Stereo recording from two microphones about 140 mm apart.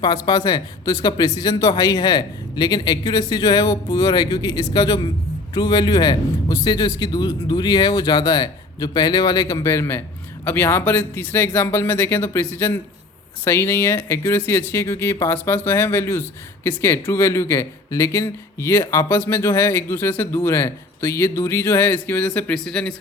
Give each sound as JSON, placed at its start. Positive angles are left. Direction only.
{"t": 0.0, "sound": "speech", "side_deg": 30}